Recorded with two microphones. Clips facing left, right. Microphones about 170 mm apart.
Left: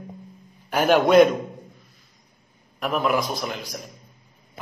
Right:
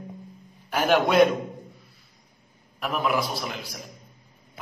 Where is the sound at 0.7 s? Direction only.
Centre (ahead or behind).